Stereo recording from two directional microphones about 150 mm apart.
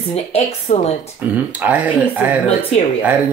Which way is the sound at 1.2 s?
10° right (ahead or behind).